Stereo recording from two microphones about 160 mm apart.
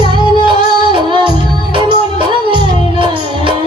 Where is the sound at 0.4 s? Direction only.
30° right (ahead or behind).